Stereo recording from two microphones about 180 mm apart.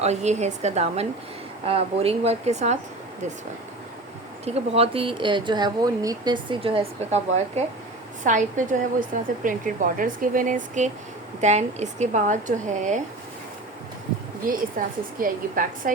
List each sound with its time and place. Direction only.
0.0 s speech: 40° right (ahead or behind)
4.4 s a woman's voice: 35° right (ahead or behind)
14.8 s a woman's voice: 50° right (ahead or behind)